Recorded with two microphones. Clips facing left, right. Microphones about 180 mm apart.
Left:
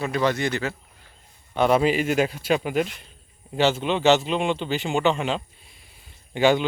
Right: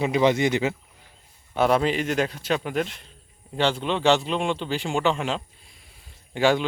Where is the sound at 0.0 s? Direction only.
20° right (ahead or behind).